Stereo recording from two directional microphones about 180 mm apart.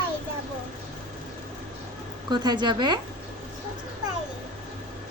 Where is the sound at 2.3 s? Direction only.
25° right (ahead or behind).